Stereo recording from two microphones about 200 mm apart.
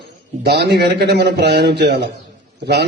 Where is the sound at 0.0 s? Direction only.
55° right (ahead or behind).